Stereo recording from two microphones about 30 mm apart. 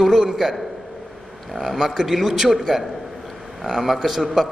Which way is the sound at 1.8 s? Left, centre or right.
Centre.